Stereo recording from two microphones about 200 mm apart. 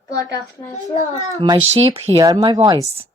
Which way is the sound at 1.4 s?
30° right (ahead or behind).